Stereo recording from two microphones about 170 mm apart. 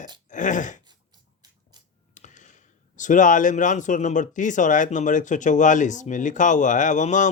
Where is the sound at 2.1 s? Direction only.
45° left (ahead or behind).